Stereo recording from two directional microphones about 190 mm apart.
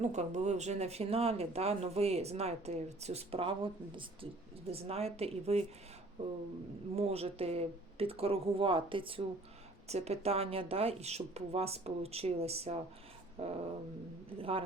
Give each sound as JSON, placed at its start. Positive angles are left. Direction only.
{"t": 0.0, "sound": "speech", "side_deg": -40}
{"t": 6.9, "sound": "speech", "side_deg": -30}